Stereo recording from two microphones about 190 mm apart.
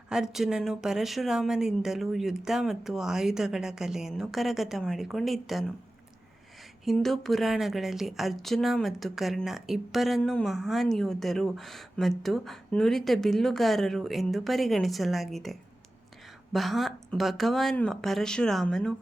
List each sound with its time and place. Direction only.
0.1 s a woman's voice: centre (ahead or behind)
6.8 s a woman's voice: centre (ahead or behind)